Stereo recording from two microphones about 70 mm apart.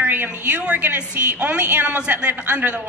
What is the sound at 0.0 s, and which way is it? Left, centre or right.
A woman's voice, right.